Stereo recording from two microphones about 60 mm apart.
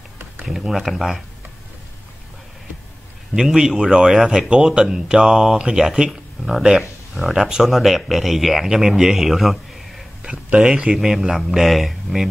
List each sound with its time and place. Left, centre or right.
0.5 s speech: centre
3.3 s speech: centre
10.3 s speech: centre